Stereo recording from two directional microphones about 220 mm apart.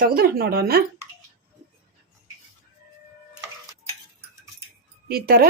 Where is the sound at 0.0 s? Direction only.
40° right (ahead or behind).